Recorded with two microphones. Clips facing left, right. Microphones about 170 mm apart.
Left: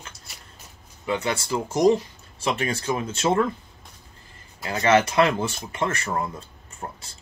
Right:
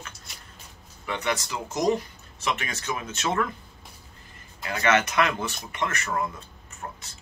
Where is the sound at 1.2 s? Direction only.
30° left (ahead or behind).